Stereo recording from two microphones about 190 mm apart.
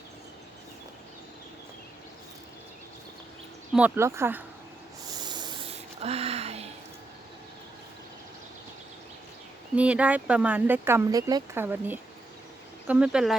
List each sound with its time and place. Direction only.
3.8 s speech: 10° right (ahead or behind)
5.2 s spray: 20° right (ahead or behind)
9.7 s speech: 5° right (ahead or behind)